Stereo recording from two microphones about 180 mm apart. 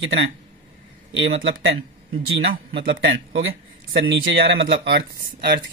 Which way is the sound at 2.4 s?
65° right (ahead or behind).